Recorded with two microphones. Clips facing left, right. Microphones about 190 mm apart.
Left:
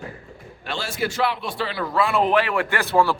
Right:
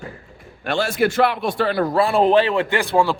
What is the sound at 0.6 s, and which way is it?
A man's voice, 55° right (ahead or behind).